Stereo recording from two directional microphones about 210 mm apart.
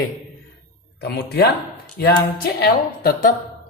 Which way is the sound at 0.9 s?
50° left (ahead or behind).